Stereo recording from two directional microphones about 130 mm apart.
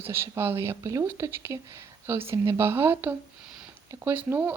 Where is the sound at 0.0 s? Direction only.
20° right (ahead or behind).